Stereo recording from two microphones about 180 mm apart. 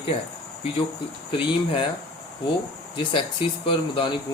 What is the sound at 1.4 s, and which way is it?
Speech, 30° left (ahead or behind).